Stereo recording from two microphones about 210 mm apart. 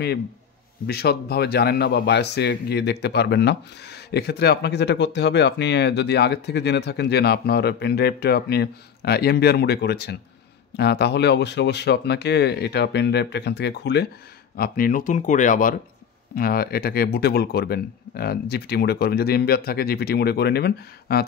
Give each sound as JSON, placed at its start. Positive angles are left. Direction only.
{"t": 0.8, "sound": "a man's voice", "side_deg": 50}
{"t": 14.6, "sound": "a man's voice", "side_deg": 40}